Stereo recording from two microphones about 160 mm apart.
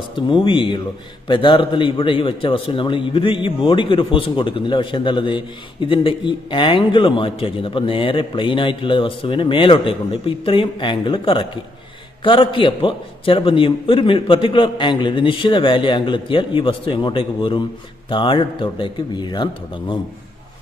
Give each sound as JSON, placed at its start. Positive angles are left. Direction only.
{"t": 0.1, "sound": "a man's voice", "side_deg": 30}